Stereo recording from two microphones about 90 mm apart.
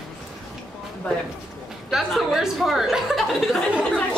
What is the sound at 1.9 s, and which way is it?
A woman's voice, 5° right (ahead or behind).